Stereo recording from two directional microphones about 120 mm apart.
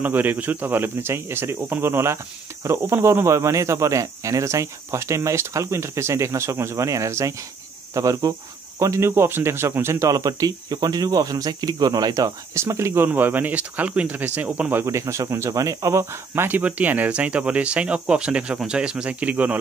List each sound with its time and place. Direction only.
0.0 s speech: 15° right (ahead or behind)